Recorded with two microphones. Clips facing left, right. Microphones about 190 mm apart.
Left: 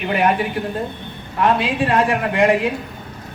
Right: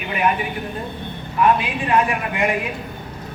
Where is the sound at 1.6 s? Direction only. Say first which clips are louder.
Left 2 dB; 75° left (ahead or behind).